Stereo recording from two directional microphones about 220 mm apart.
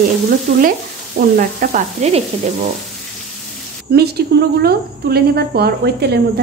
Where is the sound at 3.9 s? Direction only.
45° right (ahead or behind).